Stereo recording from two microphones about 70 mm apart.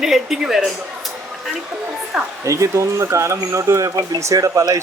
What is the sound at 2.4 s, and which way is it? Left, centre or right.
A man's voice, right.